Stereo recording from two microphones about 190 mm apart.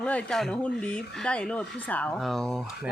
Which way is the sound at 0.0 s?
5° left (ahead or behind).